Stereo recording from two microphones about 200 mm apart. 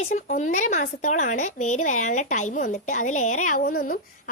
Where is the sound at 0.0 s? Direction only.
40° left (ahead or behind).